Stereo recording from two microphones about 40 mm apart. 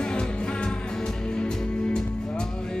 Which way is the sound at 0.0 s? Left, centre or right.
Left.